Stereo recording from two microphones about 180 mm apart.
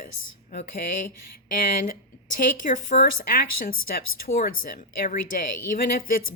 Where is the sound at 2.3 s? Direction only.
50° left (ahead or behind).